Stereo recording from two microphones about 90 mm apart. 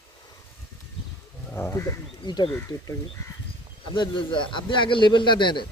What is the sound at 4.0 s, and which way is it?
A man's voice, 65° left (ahead or behind).